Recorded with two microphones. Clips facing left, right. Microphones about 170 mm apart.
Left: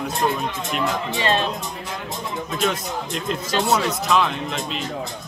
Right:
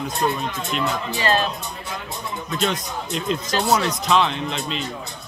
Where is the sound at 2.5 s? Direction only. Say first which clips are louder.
Even; 5° left (ahead or behind).